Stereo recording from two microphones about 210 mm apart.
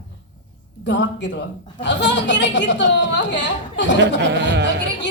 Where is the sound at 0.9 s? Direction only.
60° left (ahead or behind).